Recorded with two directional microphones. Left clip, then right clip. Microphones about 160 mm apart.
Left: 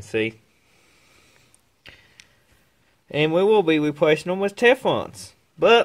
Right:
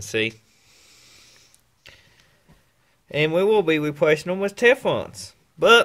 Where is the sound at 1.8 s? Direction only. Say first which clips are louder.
Left 2 dB; 25° left (ahead or behind).